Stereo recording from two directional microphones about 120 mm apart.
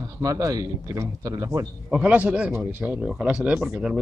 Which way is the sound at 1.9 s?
10° right (ahead or behind).